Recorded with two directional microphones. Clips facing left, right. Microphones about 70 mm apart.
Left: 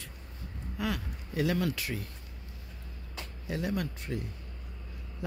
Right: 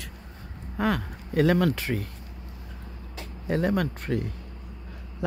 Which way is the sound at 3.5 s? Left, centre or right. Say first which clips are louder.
Right 8 dB; right.